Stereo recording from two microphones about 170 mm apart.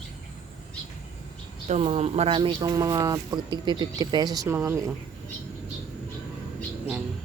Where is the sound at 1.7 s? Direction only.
40° right (ahead or behind); by 4.9 s 15° right (ahead or behind).